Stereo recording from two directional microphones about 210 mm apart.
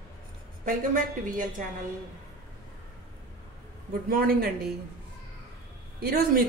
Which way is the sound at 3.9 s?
45° right (ahead or behind).